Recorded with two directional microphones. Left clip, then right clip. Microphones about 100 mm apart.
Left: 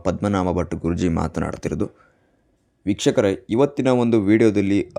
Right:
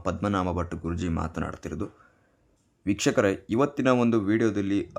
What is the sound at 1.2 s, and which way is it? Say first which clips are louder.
Speech: left 8 dB; 70° left (ahead or behind).